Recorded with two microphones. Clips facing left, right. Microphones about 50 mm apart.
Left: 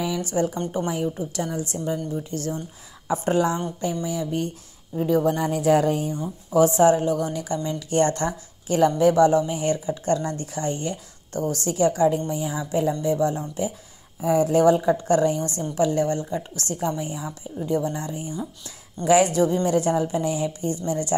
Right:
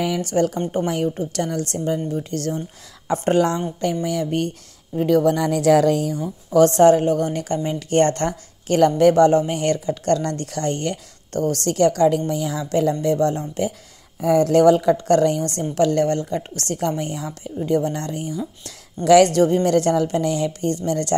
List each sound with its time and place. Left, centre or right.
0.0 s a woman's voice: right
4.9 s speech: right
6.5 s a woman's voice: right
12.3 s a woman's voice: right
13.0 s a woman's voice: right